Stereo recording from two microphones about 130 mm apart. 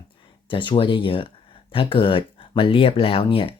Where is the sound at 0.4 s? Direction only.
40° left (ahead or behind).